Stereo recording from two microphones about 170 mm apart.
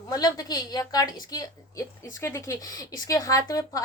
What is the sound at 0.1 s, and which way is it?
Speech, 25° left (ahead or behind).